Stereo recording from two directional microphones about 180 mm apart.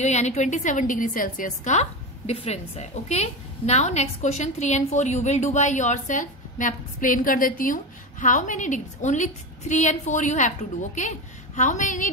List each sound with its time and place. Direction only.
0.0 s a woman's voice: 40° left (ahead or behind)